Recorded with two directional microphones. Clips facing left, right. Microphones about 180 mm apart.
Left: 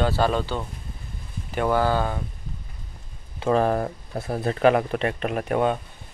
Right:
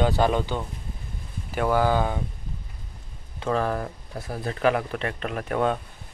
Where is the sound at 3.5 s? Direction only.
25° left (ahead or behind).